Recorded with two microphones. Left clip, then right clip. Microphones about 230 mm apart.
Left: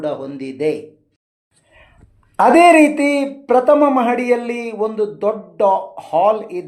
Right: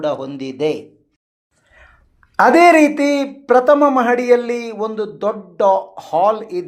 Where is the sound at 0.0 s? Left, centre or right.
Right.